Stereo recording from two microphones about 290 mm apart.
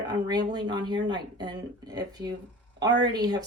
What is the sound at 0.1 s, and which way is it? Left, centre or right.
Speech, centre.